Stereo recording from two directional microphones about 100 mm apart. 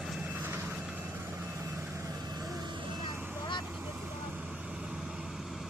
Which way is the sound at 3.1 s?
20° right (ahead or behind).